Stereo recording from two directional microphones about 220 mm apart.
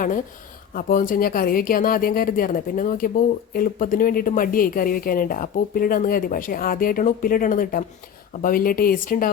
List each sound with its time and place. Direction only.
0.7 s speech: 40° left (ahead or behind)